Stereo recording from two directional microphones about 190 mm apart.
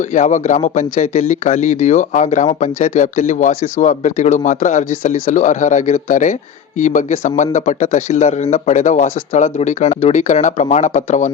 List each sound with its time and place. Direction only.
0.0 s speech: 40° left (ahead or behind)